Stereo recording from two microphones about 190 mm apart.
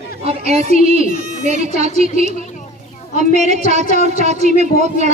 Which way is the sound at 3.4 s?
35° right (ahead or behind).